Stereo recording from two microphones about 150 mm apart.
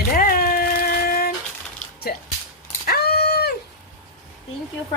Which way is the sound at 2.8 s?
90° left.